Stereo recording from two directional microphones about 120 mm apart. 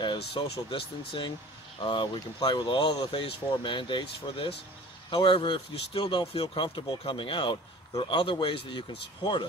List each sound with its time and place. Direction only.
0.0 s speech: 40° left (ahead or behind)